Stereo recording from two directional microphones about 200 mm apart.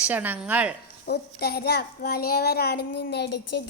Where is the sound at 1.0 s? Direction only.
50° left (ahead or behind).